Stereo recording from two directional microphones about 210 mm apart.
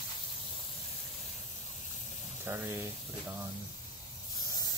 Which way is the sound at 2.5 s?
10° right (ahead or behind).